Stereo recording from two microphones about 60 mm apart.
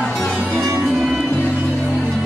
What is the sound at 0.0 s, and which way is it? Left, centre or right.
Music, centre.